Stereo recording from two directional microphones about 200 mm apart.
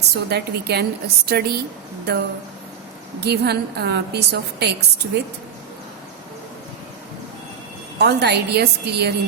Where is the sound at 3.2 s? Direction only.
55° right (ahead or behind).